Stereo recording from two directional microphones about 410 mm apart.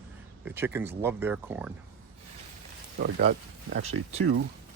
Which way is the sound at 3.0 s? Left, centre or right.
Right.